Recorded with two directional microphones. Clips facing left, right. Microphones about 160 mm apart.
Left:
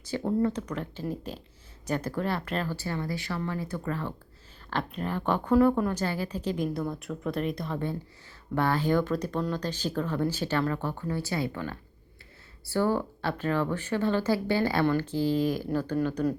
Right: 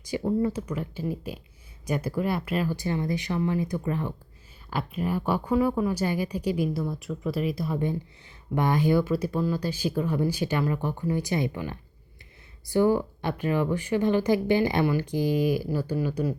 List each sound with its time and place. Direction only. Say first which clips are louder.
0.0 s a woman's voice: right 1 dB; 10° right (ahead or behind)